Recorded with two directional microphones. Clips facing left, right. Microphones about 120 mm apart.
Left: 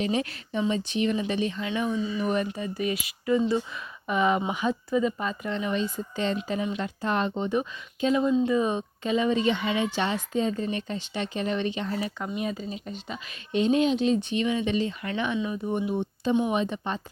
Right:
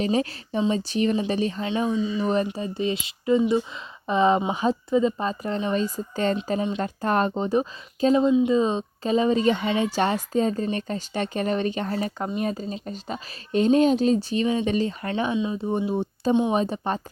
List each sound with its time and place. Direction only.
0.0 s speech: 35° right (ahead or behind)
6.3 s speech: 35° right (ahead or behind)
8.3 s speech: 20° right (ahead or behind)
9.0 s speech: 35° right (ahead or behind)
15.4 s speech: 25° right (ahead or behind); by 17.0 s 40° right (ahead or behind)